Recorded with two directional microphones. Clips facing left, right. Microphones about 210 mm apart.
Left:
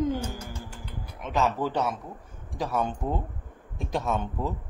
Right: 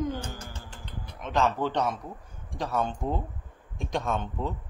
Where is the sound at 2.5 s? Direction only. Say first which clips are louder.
Left 1 dB; 10° left (ahead or behind).